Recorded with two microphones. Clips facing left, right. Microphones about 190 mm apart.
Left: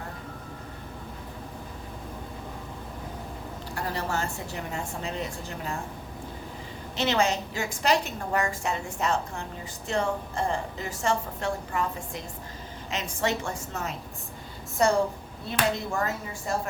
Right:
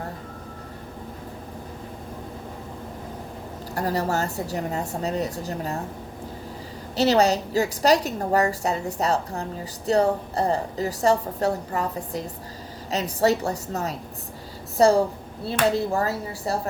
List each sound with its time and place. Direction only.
3.8 s a woman's voice: 40° right (ahead or behind)
6.9 s a woman's voice: 35° right (ahead or behind)